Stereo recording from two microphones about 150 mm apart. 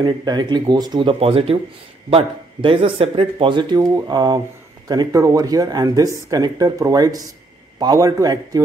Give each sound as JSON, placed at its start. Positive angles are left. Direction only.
{"t": 0.0, "sound": "speech", "side_deg": -30}